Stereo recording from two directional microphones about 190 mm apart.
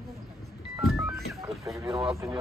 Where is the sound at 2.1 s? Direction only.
15° right (ahead or behind).